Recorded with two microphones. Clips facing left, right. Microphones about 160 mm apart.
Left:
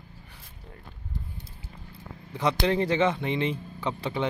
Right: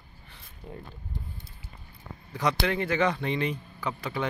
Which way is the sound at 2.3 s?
25° left (ahead or behind).